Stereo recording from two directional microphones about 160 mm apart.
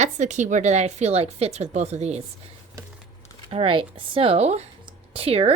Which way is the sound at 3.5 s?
35° right (ahead or behind).